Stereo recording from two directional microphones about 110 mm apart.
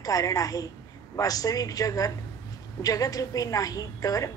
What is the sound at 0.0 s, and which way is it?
A woman's voice, 30° left (ahead or behind).